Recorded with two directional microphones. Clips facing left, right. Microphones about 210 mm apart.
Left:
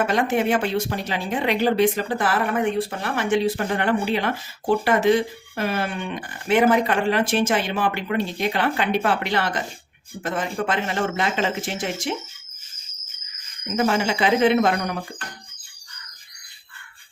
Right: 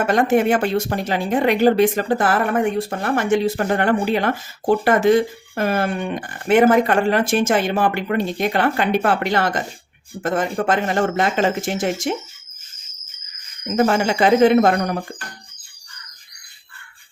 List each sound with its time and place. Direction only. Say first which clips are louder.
0.1 s speech: right 4 dB; 50° right (ahead or behind)
13.7 s speech: right 4 dB; 50° right (ahead or behind)